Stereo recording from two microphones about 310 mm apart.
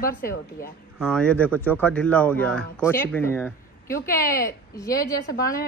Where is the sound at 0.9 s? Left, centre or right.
Centre.